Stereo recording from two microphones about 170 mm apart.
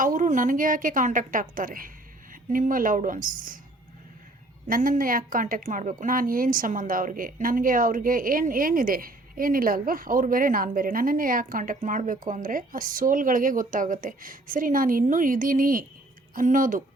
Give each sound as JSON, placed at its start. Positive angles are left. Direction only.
{"t": 0.0, "sound": "a woman's voice", "side_deg": -50}
{"t": 4.7, "sound": "a woman's voice", "side_deg": -55}